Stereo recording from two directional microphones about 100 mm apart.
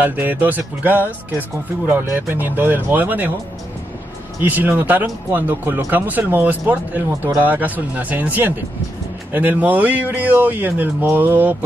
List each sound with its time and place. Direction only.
0.0 s speech: 20° right (ahead or behind)
4.4 s speech: 20° right (ahead or behind)